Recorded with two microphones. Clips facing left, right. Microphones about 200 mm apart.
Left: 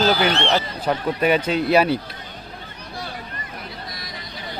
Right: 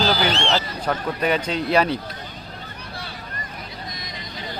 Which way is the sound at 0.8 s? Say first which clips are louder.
Left 5 dB; 10° left (ahead or behind).